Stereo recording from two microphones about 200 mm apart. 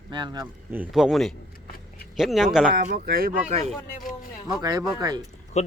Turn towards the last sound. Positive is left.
turn(degrees=35)  # may be behind; listen again after turning